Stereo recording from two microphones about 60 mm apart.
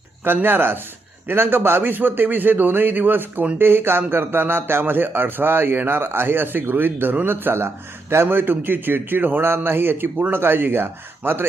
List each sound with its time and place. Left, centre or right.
0.4 s a man's voice: right